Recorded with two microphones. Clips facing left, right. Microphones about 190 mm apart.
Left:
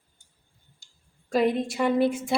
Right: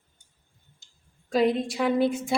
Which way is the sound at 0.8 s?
20° right (ahead or behind).